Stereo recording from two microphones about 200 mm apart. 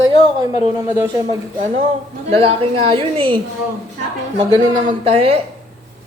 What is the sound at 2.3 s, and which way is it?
A woman's voice, 30° right (ahead or behind).